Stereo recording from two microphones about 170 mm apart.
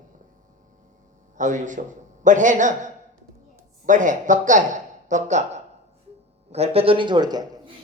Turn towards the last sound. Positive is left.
turn(degrees=-25)  # may be behind; listen again after turning